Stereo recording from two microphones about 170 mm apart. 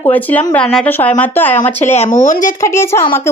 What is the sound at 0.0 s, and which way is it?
Speech, 10° left (ahead or behind).